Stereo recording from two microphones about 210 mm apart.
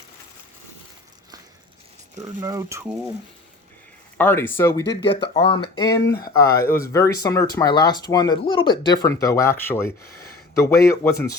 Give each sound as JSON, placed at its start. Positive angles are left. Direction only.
{"t": 2.1, "sound": "speech", "side_deg": -15}
{"t": 4.2, "sound": "speech", "side_deg": 10}
{"t": 4.9, "sound": "speech", "side_deg": 55}
{"t": 5.3, "sound": "speech", "side_deg": 25}